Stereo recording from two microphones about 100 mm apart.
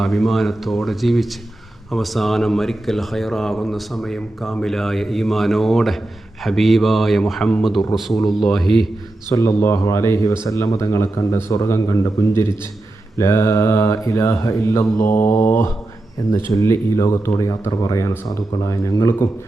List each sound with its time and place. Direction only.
0.0 s speech: centre (ahead or behind)
9.3 s mantra: 30° left (ahead or behind)
10.4 s a man's voice: 30° left (ahead or behind)
13.1 s mantra: 30° left (ahead or behind)
16.5 s a man's voice: 30° left (ahead or behind)